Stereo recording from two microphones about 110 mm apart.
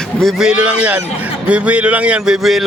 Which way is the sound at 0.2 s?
Centre (ahead or behind).